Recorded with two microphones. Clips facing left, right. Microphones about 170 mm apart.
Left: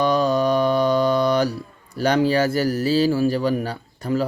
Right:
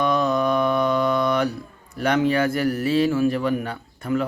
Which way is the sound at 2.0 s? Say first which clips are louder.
Left 2 dB; 30° left (ahead or behind).